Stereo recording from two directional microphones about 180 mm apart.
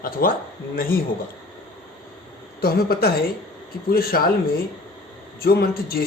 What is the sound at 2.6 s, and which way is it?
Speech, 60° left (ahead or behind).